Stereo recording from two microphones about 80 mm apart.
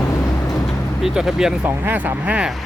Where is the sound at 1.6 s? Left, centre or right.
Right.